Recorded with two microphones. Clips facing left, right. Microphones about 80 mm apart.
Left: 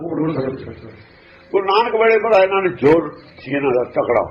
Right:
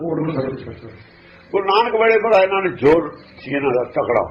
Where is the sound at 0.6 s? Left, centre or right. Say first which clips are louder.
Left 1 dB; left.